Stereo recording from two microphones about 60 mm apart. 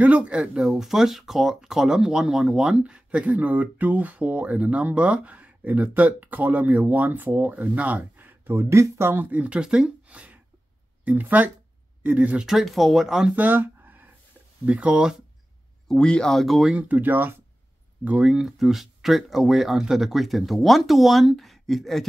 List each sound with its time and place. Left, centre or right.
0.0 s speech: right
8.5 s speech: right
9.1 s speech: right
9.6 s speech: centre
10.0 s a sound: right
11.1 s speech: right
12.4 s speech: centre
13.4 s a sound: right
14.7 s speech: right
15.9 s speech: centre
16.7 s speech: right
18.0 s speech: centre